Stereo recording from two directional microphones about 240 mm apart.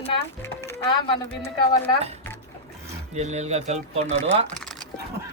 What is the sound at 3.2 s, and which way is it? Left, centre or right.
Speech, right.